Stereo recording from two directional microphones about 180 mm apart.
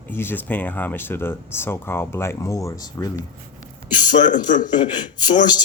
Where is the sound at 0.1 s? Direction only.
10° left (ahead or behind).